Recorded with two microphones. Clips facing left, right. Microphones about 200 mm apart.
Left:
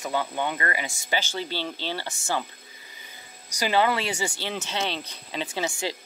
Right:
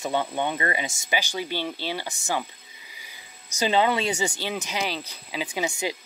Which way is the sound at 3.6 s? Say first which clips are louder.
Right 1 dB; 20° right (ahead or behind).